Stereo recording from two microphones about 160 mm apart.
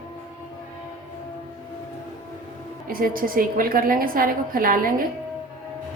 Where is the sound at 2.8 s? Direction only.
65° right (ahead or behind).